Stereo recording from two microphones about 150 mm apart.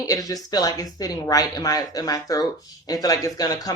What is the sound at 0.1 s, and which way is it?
Speech, 25° left (ahead or behind).